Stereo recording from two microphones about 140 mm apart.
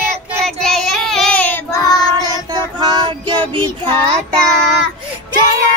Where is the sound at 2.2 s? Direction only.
30° right (ahead or behind).